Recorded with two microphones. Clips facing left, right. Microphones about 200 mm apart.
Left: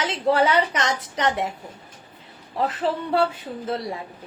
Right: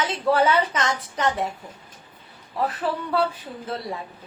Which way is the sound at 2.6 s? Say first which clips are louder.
Left 2 dB; 25° left (ahead or behind).